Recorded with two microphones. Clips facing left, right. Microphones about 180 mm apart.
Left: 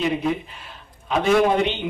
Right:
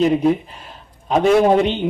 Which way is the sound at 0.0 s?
40° right (ahead or behind).